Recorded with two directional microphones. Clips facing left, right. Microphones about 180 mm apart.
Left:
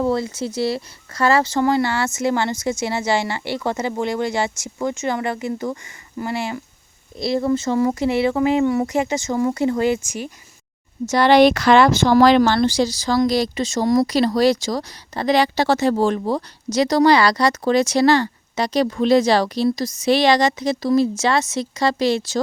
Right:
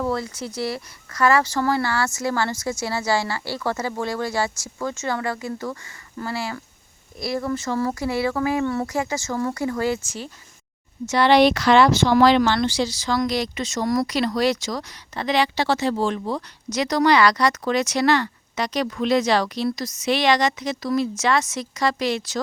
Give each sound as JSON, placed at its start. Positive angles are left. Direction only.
{"t": 0.0, "sound": "speech", "side_deg": 25}
{"t": 11.0, "sound": "speech", "side_deg": 40}
{"t": 16.7, "sound": "speech", "side_deg": 30}